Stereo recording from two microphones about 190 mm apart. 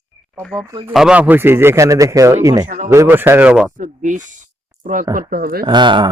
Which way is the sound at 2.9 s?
10° right (ahead or behind).